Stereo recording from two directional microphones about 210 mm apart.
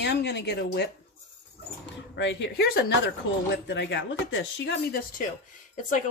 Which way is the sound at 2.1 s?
60° left (ahead or behind).